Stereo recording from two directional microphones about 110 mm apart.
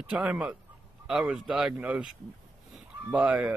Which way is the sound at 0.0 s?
10° right (ahead or behind).